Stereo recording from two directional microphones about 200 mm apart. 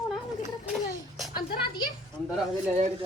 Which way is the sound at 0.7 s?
Centre (ahead or behind).